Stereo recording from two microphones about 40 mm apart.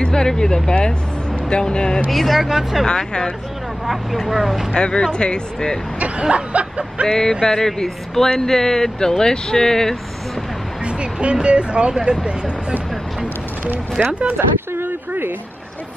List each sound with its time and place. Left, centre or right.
0.0 s speech: centre
2.0 s speech: centre
2.4 s speech: centre
2.9 s speech: centre
3.8 s speech: centre
4.7 s speech: left
5.9 s speech: right
7.1 s speech: centre
10.9 s speech: right
14.0 s speech: right
14.7 s a sound: right